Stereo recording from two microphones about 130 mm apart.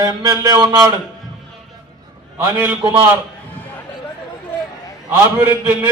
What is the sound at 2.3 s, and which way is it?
Speech, 15° right (ahead or behind).